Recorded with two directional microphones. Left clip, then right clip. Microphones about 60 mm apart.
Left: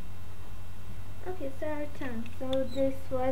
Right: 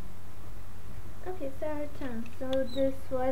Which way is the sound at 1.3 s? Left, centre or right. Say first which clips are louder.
Even; left.